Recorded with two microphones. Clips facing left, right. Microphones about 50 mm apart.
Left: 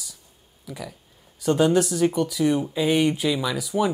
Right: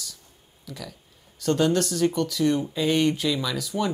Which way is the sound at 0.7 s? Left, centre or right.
Centre.